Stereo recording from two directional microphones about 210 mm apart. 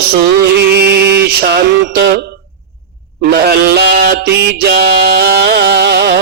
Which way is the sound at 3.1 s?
50° right (ahead or behind).